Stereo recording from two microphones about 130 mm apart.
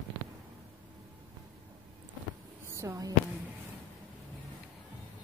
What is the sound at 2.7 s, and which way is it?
Speech, 25° right (ahead or behind).